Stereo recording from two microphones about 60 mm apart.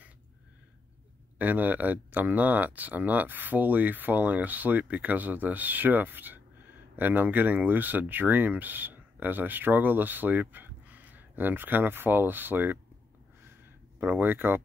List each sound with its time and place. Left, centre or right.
1.4 s speech: right
13.9 s speech: right